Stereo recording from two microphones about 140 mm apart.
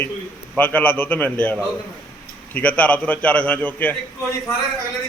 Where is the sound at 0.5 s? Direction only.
10° left (ahead or behind).